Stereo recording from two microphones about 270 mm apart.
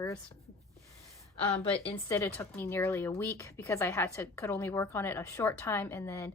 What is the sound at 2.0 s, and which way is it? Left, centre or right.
A woman's voice, centre.